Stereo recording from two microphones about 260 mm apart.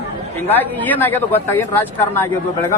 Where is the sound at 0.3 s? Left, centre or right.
Centre.